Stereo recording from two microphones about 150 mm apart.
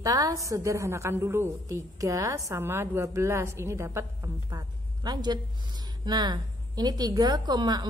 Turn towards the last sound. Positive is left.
turn(degrees=-30)  # may be behind; listen again after turning